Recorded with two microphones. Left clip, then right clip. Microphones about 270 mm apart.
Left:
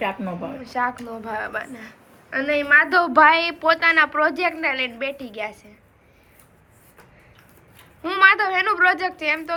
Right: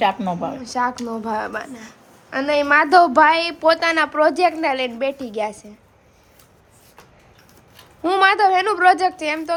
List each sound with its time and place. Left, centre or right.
0.0 s a woman's voice: right
0.6 s a woman's voice: centre
8.0 s a woman's voice: centre